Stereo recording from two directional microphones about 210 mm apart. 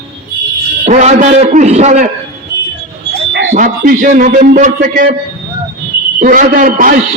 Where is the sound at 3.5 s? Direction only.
40° right (ahead or behind).